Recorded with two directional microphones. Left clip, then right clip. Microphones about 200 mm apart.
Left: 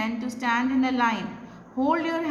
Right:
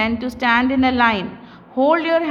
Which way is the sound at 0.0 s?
40° right (ahead or behind).